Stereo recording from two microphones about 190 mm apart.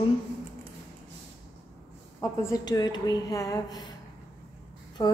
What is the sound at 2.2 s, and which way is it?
A woman's voice, 15° left (ahead or behind).